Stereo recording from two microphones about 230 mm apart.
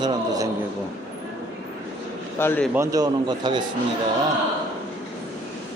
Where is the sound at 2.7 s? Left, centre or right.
Centre.